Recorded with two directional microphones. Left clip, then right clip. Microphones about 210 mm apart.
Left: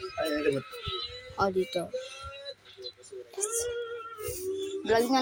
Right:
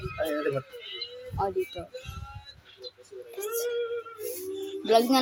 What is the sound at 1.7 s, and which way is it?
Speech, 30° left (ahead or behind).